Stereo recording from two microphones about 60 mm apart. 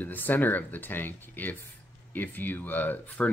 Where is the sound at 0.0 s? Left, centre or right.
Left.